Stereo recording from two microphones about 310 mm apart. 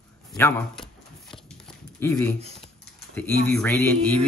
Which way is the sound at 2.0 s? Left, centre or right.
Centre.